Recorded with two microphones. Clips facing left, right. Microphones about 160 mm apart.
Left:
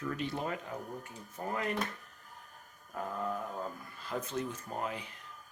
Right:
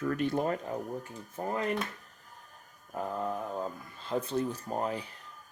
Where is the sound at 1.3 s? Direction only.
30° right (ahead or behind).